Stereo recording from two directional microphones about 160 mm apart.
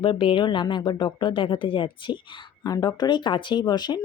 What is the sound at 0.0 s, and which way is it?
Speech, 30° left (ahead or behind).